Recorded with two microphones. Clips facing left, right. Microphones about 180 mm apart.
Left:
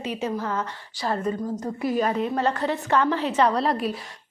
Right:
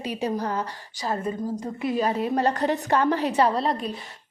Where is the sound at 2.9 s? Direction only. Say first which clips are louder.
Left 1 dB; 35° right (ahead or behind).